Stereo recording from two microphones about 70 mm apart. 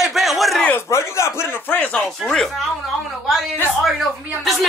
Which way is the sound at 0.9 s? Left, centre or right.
Left.